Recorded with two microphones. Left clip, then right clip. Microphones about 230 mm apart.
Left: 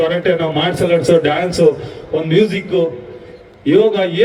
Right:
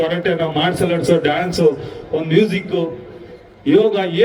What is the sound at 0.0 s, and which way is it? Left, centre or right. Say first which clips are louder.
A man's voice: left 3 dB; right.